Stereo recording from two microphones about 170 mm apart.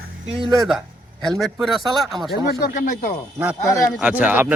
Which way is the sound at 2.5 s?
60° left (ahead or behind).